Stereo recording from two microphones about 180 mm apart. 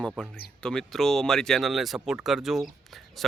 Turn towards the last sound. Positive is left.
turn(degrees=0)  # may be behind; listen again after turning